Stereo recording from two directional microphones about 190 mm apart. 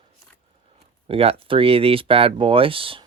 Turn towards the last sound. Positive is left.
turn(degrees=-30)  # may be behind; listen again after turning